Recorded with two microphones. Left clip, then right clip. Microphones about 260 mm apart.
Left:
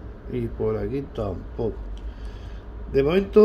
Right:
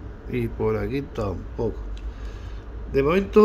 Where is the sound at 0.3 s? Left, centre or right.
Centre.